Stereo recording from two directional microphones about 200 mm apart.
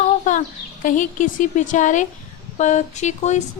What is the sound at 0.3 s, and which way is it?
A woman's voice, 40° left (ahead or behind).